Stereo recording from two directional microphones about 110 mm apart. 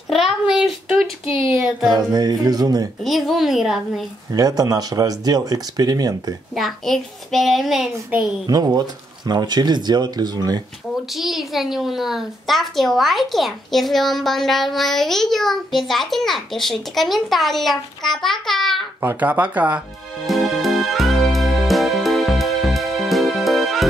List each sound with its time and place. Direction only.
0.1 s a child's voice: centre (ahead or behind)
1.9 s speech: 35° right (ahead or behind)
3.0 s a child's voice: centre (ahead or behind)
4.3 s speech: 35° right (ahead or behind)
6.5 s a child's voice: centre (ahead or behind)
8.5 s speech: 35° right (ahead or behind)
11.1 s a child's voice: centre (ahead or behind)
18.9 s speech: 20° right (ahead or behind)
20.2 s music: centre (ahead or behind)